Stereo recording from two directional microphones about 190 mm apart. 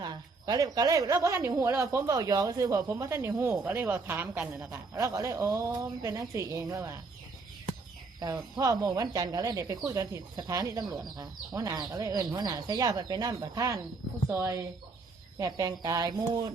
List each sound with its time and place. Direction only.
0.0 s a woman's voice: 20° right (ahead or behind)
8.2 s a woman's voice: 20° right (ahead or behind)